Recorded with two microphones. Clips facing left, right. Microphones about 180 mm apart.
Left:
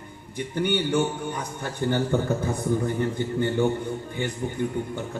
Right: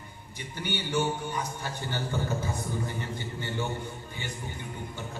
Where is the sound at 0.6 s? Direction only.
55° left (ahead or behind).